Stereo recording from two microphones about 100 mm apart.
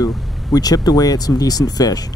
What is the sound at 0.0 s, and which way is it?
Speech, 40° left (ahead or behind).